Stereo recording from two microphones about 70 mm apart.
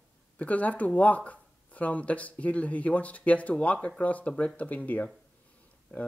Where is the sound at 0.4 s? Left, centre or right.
Left.